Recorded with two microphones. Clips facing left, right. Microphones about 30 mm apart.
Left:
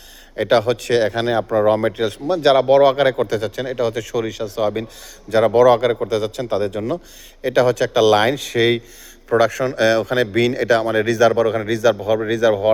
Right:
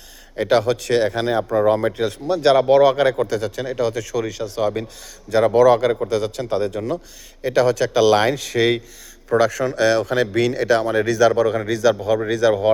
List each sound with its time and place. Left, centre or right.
0.3 s speech: centre
8.5 s speech: left
10.0 s speech: centre